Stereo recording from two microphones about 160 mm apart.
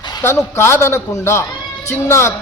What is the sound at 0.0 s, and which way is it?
A man's voice, 15° left (ahead or behind).